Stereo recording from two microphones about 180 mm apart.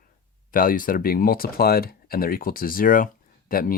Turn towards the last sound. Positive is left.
turn(degrees=50)  # may be behind; listen again after turning